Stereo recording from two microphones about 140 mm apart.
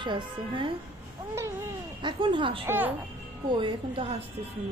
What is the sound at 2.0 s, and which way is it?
Speech, 35° right (ahead or behind).